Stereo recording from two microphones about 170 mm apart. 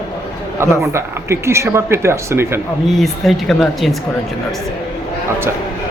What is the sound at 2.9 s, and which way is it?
A man's voice, centre (ahead or behind).